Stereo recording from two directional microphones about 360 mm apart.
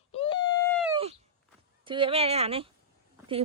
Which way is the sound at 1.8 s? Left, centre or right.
Centre.